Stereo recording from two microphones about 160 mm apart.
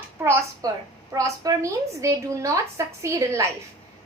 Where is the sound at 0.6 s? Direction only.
20° right (ahead or behind).